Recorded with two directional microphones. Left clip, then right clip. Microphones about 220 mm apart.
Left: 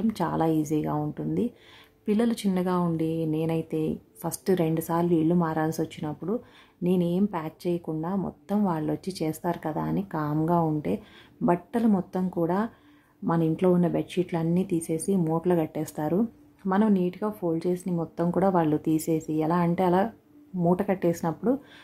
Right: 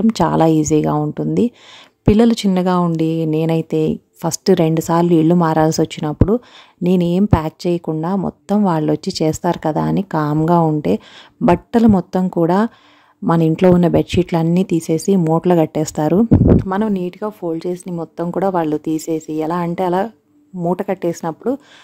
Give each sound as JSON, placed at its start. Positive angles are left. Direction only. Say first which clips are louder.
{"t": 0.0, "sound": "a woman's voice", "louder": "right 12 dB", "side_deg": -40}